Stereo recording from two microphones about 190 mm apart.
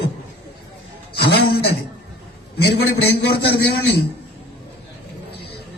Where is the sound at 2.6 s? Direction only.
60° left (ahead or behind).